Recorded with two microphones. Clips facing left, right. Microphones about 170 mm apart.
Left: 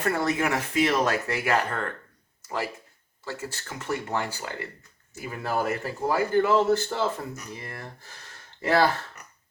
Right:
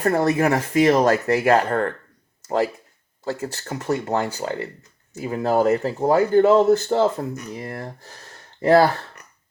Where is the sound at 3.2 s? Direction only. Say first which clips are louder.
Right 8 dB; 40° right (ahead or behind).